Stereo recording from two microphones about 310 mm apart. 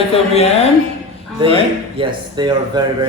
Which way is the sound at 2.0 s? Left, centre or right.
Centre.